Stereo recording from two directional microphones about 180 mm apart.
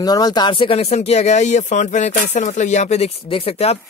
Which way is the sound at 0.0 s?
20° left (ahead or behind).